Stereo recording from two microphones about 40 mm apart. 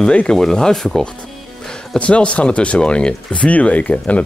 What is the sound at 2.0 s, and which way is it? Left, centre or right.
Speech, left.